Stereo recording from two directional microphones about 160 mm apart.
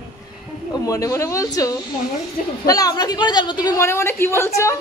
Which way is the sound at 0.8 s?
20° left (ahead or behind).